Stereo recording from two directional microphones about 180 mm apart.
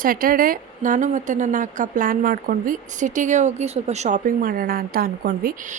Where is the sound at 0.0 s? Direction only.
50° right (ahead or behind).